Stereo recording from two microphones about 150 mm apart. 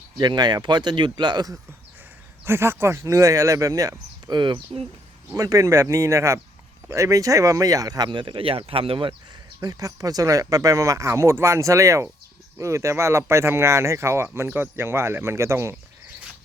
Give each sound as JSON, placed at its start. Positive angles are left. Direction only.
{"t": 0.2, "sound": "speech", "side_deg": -30}
{"t": 2.4, "sound": "speech", "side_deg": -15}
{"t": 5.3, "sound": "speech", "side_deg": -20}
{"t": 9.6, "sound": "speech", "side_deg": -25}